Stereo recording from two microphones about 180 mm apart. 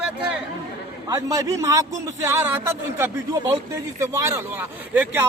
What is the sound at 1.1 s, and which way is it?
A man's voice, 20° right (ahead or behind).